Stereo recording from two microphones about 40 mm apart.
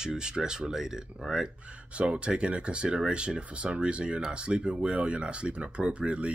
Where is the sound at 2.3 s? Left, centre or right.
Right.